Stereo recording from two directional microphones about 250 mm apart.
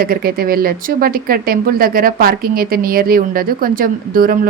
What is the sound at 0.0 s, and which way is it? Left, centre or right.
Speech, right.